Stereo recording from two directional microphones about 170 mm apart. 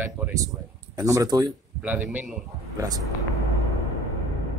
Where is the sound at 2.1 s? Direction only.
10° right (ahead or behind).